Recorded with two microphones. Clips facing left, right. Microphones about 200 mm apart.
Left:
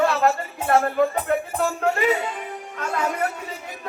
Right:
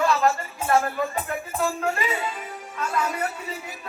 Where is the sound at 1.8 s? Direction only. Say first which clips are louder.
Left 5 dB; 60° left (ahead or behind).